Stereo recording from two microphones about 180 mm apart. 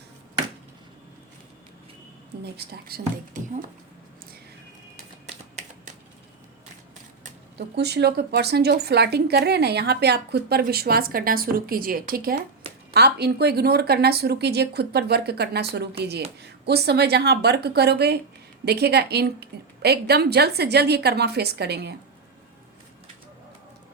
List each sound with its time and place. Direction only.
2.4 s speech: 60° right (ahead or behind)
5.2 s typing: 40° right (ahead or behind)
7.8 s speech: 65° right (ahead or behind)